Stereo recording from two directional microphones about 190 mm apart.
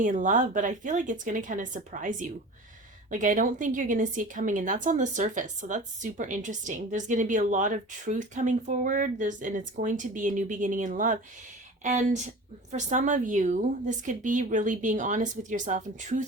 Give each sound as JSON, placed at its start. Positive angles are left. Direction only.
{"t": 0.0, "sound": "a woman's voice", "side_deg": -45}